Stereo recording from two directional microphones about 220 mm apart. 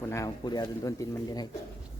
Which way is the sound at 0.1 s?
15° left (ahead or behind).